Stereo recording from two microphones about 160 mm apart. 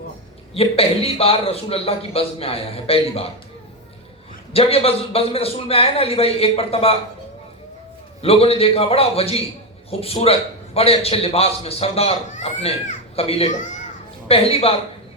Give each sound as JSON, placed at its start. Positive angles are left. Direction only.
{"t": 0.5, "sound": "a man's voice", "side_deg": 35}
{"t": 4.5, "sound": "a man's voice", "side_deg": 40}
{"t": 8.2, "sound": "a man's voice", "side_deg": 35}